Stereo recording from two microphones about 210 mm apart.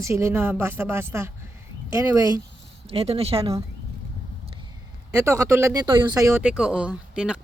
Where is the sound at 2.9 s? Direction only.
30° right (ahead or behind).